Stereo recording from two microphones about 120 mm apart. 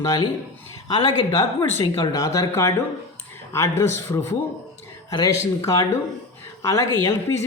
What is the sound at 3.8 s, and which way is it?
Speech, 25° left (ahead or behind).